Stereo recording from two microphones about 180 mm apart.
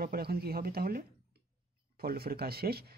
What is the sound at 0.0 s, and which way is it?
Speech, 60° right (ahead or behind).